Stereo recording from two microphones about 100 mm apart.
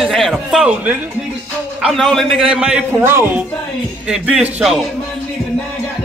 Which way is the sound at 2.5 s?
10° right (ahead or behind).